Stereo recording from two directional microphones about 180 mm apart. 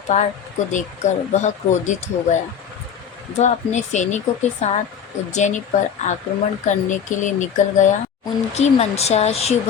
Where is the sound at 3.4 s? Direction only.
40° left (ahead or behind).